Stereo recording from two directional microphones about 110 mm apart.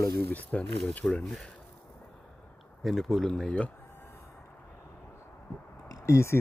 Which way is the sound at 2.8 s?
Centre (ahead or behind).